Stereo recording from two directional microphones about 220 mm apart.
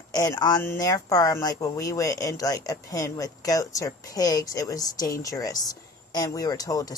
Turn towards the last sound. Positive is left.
turn(degrees=15)  # may be behind; listen again after turning